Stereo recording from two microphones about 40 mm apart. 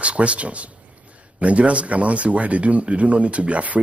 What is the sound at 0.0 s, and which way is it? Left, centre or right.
A man's voice, right.